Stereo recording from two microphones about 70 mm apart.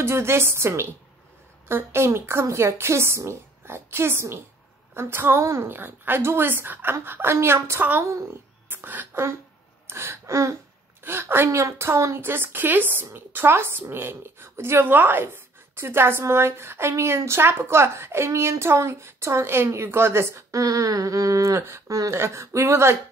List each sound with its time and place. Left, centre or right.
0.0 s speech: right
5.4 s a sound: right
5.7 s speech: right
8.0 s a sound: right
8.6 s speech: right
9.8 s gasp: right
11.1 s speech: right
20.6 s a sound: right
22.1 s speech: right